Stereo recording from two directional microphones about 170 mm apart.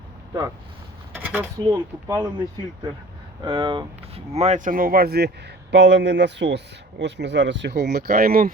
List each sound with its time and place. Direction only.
1.2 s speech: 10° right (ahead or behind)
1.7 s speech: 20° right (ahead or behind); by 5.3 s 70° right (ahead or behind)
5.7 s speech: 90° right; by 8.4 s 60° right (ahead or behind)